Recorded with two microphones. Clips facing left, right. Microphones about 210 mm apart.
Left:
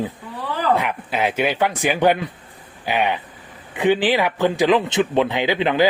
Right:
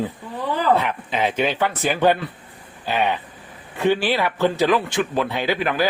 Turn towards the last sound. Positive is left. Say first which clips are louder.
# left 3 dB
turn(degrees=20)  # may be behind; listen again after turning